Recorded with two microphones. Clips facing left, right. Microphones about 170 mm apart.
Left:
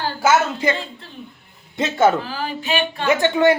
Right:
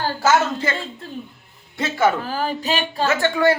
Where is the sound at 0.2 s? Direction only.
10° left (ahead or behind).